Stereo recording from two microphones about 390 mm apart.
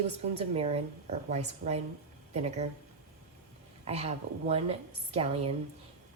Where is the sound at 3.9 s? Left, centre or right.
Centre.